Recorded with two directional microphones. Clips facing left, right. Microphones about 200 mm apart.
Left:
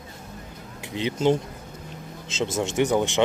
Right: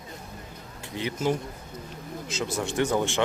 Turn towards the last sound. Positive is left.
turn(degrees=15)  # may be behind; listen again after turning